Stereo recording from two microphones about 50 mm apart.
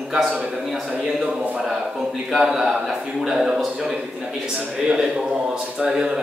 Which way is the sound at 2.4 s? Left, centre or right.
Centre.